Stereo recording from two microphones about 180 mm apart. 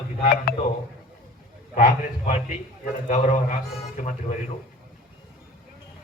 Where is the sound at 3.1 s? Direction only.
40° left (ahead or behind).